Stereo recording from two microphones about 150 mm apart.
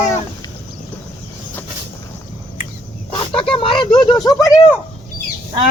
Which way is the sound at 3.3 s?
35° left (ahead or behind).